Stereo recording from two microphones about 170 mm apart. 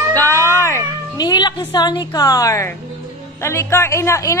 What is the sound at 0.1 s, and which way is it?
Cat, 15° left (ahead or behind).